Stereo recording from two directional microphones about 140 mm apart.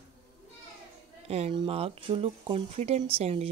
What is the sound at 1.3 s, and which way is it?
A woman's voice, 50° right (ahead or behind).